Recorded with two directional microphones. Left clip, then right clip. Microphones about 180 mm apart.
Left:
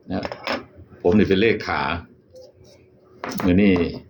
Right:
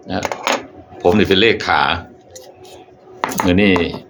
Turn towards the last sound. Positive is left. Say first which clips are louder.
# right 5 dB
turn(degrees=10)  # may be behind; listen again after turning